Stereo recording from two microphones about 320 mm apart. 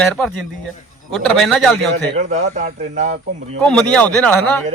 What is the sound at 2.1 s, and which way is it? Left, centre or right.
Speech, right.